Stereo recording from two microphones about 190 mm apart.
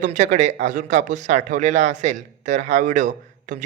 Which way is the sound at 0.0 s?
40° right (ahead or behind).